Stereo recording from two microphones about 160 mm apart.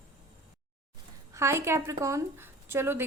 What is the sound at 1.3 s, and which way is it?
Speech, 15° right (ahead or behind).